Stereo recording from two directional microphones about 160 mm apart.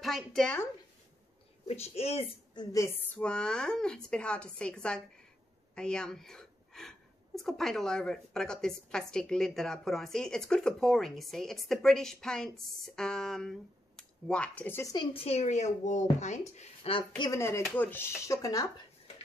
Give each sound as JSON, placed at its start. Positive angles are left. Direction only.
{"t": 0.0, "sound": "a woman's voice", "side_deg": 0}
{"t": 1.7, "sound": "a woman's voice", "side_deg": 40}
{"t": 2.5, "sound": "speech", "side_deg": 20}
{"t": 3.2, "sound": "a woman's voice", "side_deg": 5}
{"t": 15.1, "sound": "a woman's voice", "side_deg": 40}
{"t": 17.2, "sound": "speech", "side_deg": 20}